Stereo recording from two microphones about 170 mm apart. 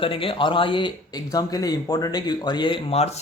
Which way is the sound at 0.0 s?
30° left (ahead or behind).